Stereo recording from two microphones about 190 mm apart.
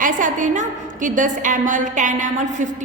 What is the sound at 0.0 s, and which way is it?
A woman's voice, 45° right (ahead or behind).